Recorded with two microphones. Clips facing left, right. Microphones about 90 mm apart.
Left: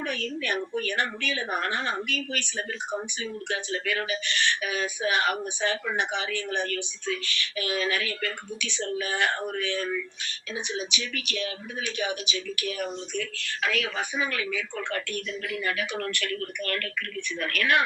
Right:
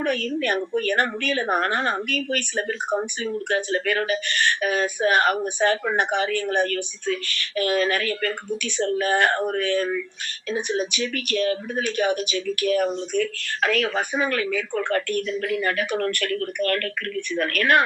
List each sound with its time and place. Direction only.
0.0 s speech: 50° right (ahead or behind)